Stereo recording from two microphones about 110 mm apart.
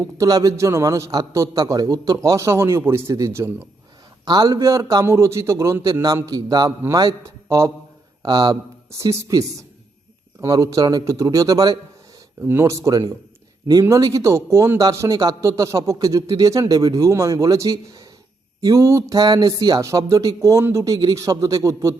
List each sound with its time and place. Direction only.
0.2 s a man's voice: 35° right (ahead or behind)
4.3 s a man's voice: 40° right (ahead or behind)
8.2 s a man's voice: 40° right (ahead or behind)
9.0 s a man's voice: 30° right (ahead or behind)
10.4 s a man's voice: 30° right (ahead or behind)
12.4 s a man's voice: 25° right (ahead or behind)
19.1 s a man's voice: 40° right (ahead or behind)